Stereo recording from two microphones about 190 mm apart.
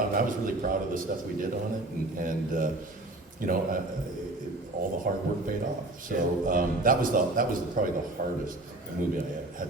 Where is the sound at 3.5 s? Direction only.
50° right (ahead or behind).